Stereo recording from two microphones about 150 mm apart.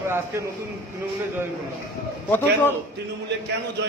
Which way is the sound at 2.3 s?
15° left (ahead or behind).